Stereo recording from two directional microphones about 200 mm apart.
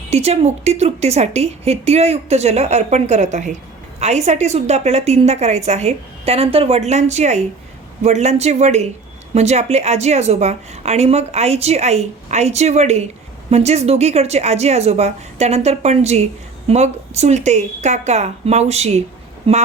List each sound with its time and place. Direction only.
0.1 s a woman's voice: 30° right (ahead or behind)